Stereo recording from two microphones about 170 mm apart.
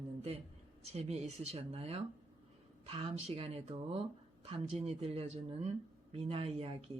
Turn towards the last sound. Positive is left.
turn(degrees=-35)  # may be behind; listen again after turning